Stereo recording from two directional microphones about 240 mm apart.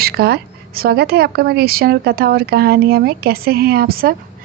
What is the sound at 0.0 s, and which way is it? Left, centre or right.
A woman's voice, right.